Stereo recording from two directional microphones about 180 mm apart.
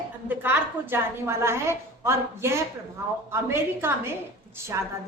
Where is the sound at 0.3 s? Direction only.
10° right (ahead or behind).